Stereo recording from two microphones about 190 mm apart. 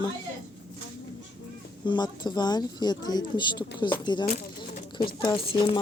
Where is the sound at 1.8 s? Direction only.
25° left (ahead or behind).